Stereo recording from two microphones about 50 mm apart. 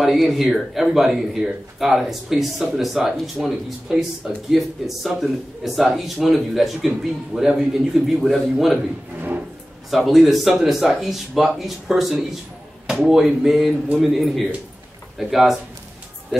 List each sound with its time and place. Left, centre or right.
0.0 s speech: centre
8.7 s speech: right
9.8 s speech: centre